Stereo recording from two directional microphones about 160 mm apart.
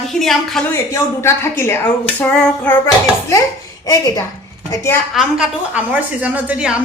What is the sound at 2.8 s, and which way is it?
Speech, 20° left (ahead or behind).